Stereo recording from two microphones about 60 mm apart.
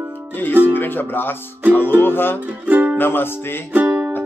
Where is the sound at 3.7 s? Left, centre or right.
Right.